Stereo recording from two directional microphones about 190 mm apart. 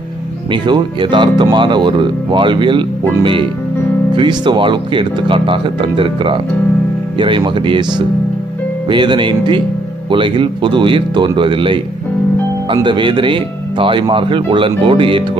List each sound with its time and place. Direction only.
0.5 s speech: 25° right (ahead or behind)
4.1 s speech: 25° right (ahead or behind)